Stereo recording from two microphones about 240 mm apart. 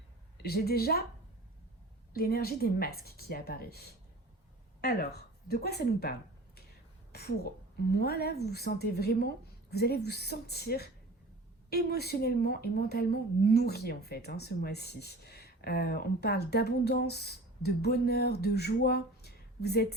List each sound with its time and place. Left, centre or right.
0.4 s a woman's voice: left
2.1 s a woman's voice: left